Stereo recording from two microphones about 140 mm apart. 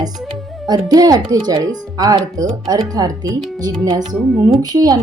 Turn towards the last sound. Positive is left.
turn(degrees=-30)  # may be behind; listen again after turning